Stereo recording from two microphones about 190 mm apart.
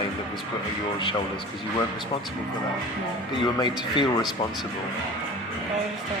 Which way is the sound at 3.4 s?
25° left (ahead or behind).